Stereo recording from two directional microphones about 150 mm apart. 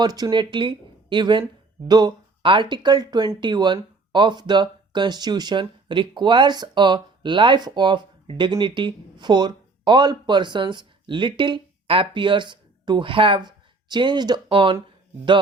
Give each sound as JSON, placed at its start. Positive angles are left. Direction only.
{"t": 0.0, "sound": "speech", "side_deg": -25}